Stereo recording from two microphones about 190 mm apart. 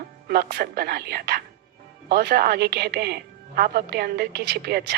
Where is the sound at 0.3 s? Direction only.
55° right (ahead or behind).